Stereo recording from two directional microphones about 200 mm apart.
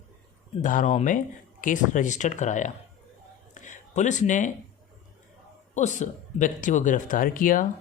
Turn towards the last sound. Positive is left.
turn(degrees=45)  # may be behind; listen again after turning